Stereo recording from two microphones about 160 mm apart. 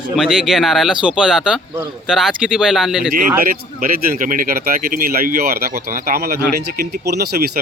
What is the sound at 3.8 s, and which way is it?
Speech, 55° right (ahead or behind).